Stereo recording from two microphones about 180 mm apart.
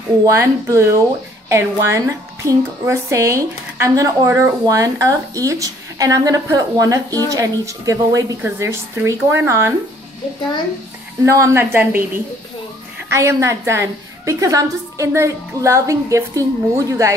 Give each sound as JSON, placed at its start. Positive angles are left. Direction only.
{"t": 0.2, "sound": "a woman's voice", "side_deg": -20}
{"t": 11.2, "sound": "a woman's voice", "side_deg": -15}
{"t": 13.1, "sound": "a woman's voice", "side_deg": -15}